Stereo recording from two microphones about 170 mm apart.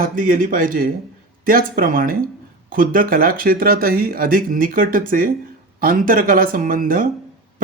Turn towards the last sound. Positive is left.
turn(degrees=-55)  # may be behind; listen again after turning